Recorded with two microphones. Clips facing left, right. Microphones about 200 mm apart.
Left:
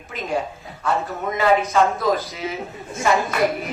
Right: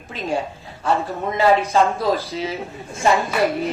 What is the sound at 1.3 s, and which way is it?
A woman's voice, 30° right (ahead or behind).